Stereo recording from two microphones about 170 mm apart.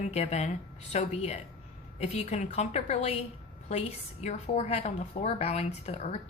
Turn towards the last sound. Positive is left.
turn(degrees=40)  # may be behind; listen again after turning